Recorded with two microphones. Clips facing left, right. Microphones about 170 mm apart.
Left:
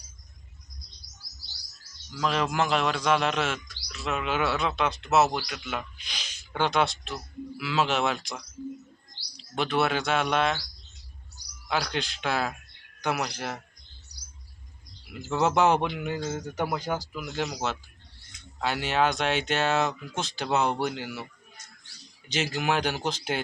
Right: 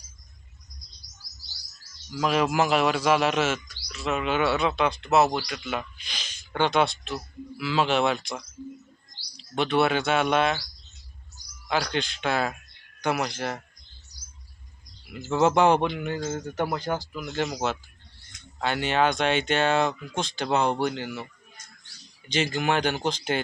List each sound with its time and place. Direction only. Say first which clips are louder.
2.0 s speech: right 3 dB; 10° right (ahead or behind)
11.7 s speech: right 2 dB; centre (ahead or behind)
15.1 s speech: right 3 dB; centre (ahead or behind)
22.3 s speech: right 2 dB; 5° left (ahead or behind)